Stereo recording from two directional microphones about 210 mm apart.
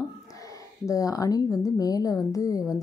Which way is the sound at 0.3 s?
15° left (ahead or behind).